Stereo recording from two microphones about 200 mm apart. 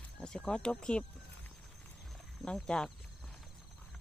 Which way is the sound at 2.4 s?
5° left (ahead or behind).